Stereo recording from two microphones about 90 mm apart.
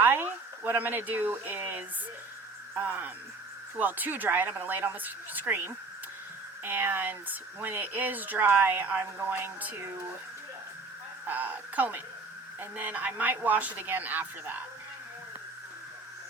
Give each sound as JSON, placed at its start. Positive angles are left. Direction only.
{"t": 0.0, "sound": "speech", "side_deg": -25}
{"t": 11.3, "sound": "speech", "side_deg": -20}